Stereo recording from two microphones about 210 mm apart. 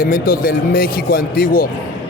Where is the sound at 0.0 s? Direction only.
40° left (ahead or behind).